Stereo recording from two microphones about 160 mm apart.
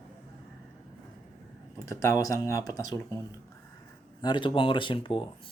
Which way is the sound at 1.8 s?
20° left (ahead or behind).